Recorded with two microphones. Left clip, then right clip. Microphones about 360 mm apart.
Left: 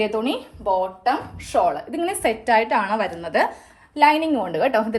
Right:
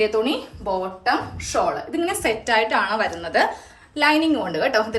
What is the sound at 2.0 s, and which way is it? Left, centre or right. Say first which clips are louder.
A woman's voice: left 1 dB; centre.